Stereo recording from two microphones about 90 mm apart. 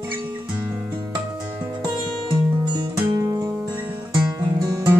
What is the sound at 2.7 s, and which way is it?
Music, 40° right (ahead or behind).